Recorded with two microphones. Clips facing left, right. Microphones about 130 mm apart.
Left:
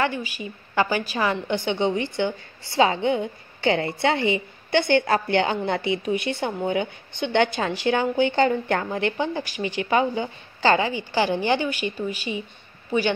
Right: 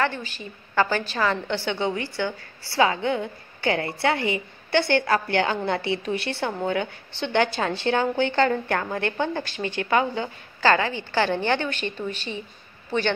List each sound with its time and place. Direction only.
0.0 s a woman's voice: 10° left (ahead or behind)